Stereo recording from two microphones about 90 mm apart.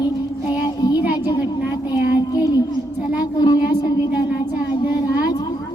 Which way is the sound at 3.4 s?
45° left (ahead or behind).